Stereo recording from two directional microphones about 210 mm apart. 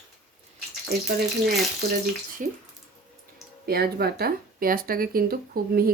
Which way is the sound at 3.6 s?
45° right (ahead or behind).